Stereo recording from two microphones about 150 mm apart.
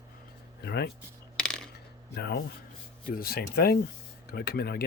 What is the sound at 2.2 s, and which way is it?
Speech, 90° left.